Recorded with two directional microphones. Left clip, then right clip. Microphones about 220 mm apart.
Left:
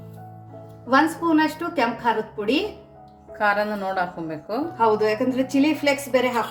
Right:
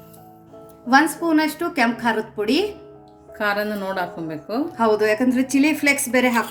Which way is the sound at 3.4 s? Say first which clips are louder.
Left 1 dB; 15° right (ahead or behind).